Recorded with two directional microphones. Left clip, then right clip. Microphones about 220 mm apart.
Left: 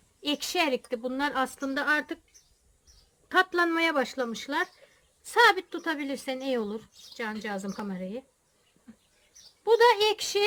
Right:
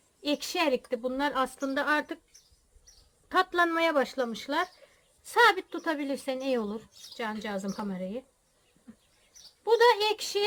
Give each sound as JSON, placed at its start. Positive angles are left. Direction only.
{"t": 0.2, "sound": "a woman's voice", "side_deg": 20}
{"t": 3.2, "sound": "speech", "side_deg": 20}
{"t": 9.6, "sound": "speech", "side_deg": 15}